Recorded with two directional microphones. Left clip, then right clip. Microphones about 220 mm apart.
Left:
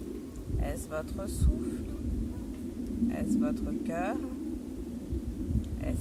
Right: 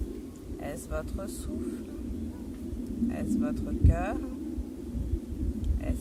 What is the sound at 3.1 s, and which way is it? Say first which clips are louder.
Speech: left 1 dB; centre (ahead or behind).